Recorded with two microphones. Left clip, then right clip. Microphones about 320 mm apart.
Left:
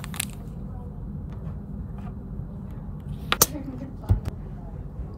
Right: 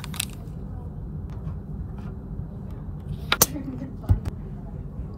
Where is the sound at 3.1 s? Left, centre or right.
Centre.